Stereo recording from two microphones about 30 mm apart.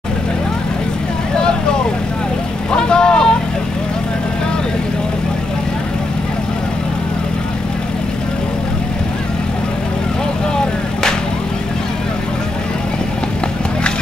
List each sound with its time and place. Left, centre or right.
2.7 s vehicle: left